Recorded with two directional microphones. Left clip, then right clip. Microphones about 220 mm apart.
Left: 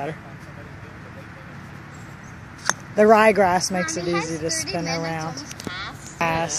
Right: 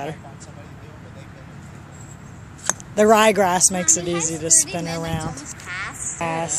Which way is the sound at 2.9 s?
5° right (ahead or behind).